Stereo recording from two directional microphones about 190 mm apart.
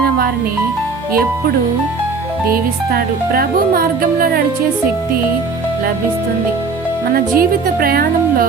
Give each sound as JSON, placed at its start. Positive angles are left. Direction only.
{"t": 2.9, "sound": "speech", "side_deg": -50}
{"t": 7.1, "sound": "speech", "side_deg": -50}